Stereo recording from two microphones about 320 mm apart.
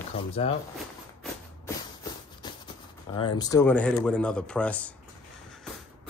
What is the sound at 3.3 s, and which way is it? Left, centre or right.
Speech, centre.